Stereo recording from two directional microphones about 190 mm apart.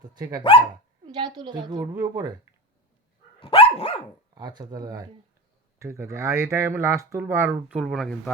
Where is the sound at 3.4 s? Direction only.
30° left (ahead or behind).